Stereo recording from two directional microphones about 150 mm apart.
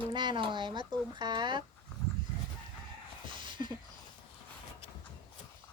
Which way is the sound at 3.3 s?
35° right (ahead or behind).